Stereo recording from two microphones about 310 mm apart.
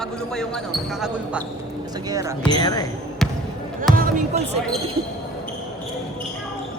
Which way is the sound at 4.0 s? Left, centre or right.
Right.